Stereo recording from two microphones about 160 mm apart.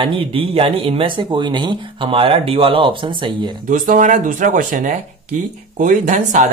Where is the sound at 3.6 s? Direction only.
55° right (ahead or behind).